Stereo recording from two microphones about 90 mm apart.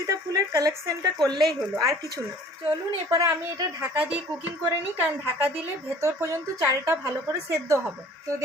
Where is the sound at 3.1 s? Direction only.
35° right (ahead or behind).